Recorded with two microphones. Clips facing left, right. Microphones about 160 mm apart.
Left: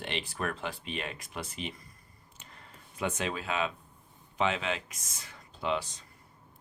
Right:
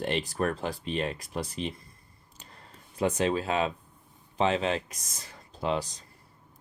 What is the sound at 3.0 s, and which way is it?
Speech, 35° right (ahead or behind).